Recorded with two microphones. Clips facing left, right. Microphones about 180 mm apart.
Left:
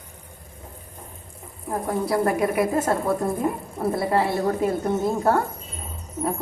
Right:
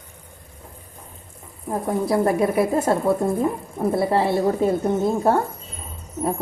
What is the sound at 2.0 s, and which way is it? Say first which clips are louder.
Speech: right 3 dB; 25° right (ahead or behind).